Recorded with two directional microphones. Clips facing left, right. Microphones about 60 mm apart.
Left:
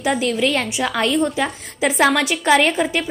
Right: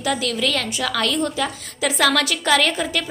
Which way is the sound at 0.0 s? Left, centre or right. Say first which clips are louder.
Left 3 dB; left.